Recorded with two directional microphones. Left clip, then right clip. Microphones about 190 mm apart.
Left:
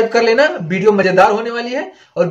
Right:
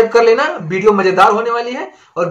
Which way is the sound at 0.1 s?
15° left (ahead or behind).